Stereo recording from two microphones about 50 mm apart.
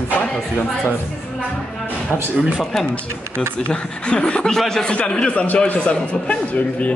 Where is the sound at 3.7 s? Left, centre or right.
Centre.